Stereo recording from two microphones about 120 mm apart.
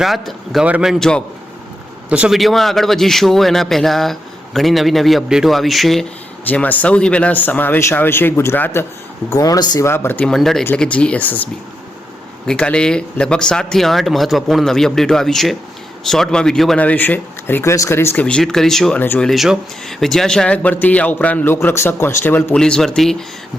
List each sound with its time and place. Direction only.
0.0 s a man's voice: centre (ahead or behind)
2.0 s a man's voice: 10° right (ahead or behind)
6.5 s speech: 15° left (ahead or behind)
9.3 s speech: 30° left (ahead or behind)
10.2 s a man's voice: 5° left (ahead or behind)
12.5 s a man's voice: 10° left (ahead or behind)
18.3 s a man's voice: 5° left (ahead or behind)
18.9 s speech: 15° left (ahead or behind)
19.2 s a man's voice: centre (ahead or behind); by 22.5 s 15° left (ahead or behind)
22.5 s a man's voice: 5° left (ahead or behind)